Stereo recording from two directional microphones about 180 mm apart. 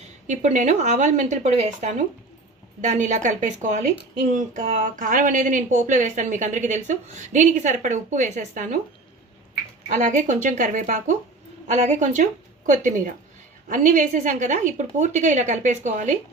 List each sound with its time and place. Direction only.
0.0 s a woman's voice: 40° right (ahead or behind)
9.9 s a woman's voice: 45° right (ahead or behind)
13.7 s a woman's voice: 45° right (ahead or behind)